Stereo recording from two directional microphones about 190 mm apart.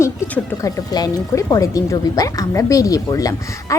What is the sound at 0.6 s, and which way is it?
Speech, 20° left (ahead or behind).